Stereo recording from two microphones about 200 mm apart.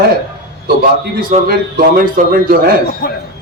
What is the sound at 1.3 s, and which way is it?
Speech, 35° right (ahead or behind).